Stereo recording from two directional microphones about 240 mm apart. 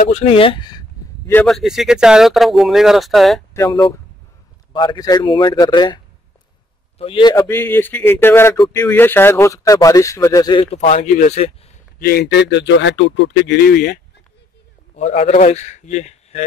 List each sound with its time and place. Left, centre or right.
0.1 s a sound: left
1.4 s speech: centre
3.5 s a man's voice: centre
7.0 s a man's voice: left
7.4 s speech: centre; by 11.7 s left
12.0 s speech: left
15.0 s a man's voice: left